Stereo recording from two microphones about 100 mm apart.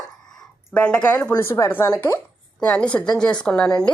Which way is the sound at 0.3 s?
5° left (ahead or behind).